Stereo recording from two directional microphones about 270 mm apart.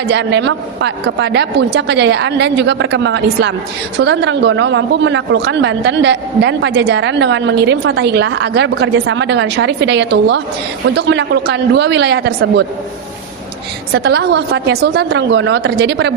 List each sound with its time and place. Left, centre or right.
0.1 s speech: right
13.9 s speech: right